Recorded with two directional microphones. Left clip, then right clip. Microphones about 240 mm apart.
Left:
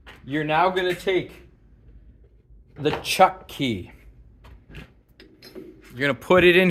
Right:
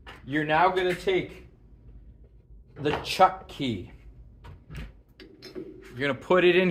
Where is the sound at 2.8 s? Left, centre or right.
Left.